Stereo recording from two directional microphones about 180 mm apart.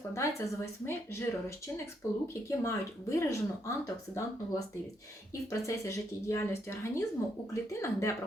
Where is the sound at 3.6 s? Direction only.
15° left (ahead or behind).